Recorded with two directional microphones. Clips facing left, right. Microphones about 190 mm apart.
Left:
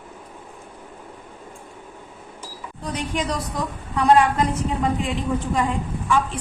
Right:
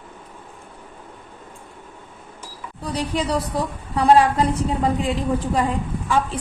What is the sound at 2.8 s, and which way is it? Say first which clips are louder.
A woman's voice: right 2 dB; 35° right (ahead or behind).